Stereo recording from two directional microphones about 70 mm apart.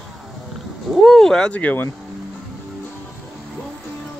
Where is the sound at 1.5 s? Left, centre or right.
Left.